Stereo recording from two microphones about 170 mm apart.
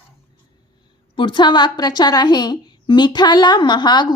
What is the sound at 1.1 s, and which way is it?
A woman's voice, 30° left (ahead or behind).